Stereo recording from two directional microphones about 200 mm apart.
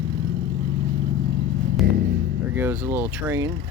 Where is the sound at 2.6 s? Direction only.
10° right (ahead or behind).